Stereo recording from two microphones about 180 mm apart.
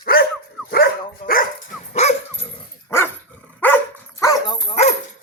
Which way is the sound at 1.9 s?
40° left (ahead or behind).